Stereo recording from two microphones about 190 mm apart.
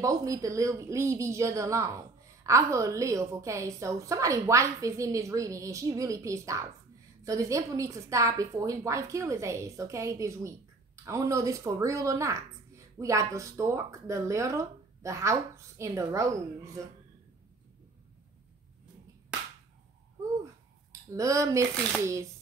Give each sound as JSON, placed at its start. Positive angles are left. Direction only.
{"t": 0.0, "sound": "speech", "side_deg": -20}
{"t": 21.1, "sound": "speech", "side_deg": -15}